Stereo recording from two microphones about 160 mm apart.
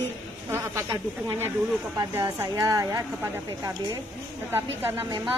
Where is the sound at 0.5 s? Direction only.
20° right (ahead or behind).